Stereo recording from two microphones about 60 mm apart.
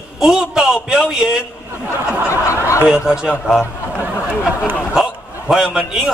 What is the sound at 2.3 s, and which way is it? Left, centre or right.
Speech, left.